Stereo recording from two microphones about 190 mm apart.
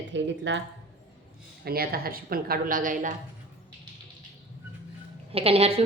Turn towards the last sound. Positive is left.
turn(degrees=-30)  # may be behind; listen again after turning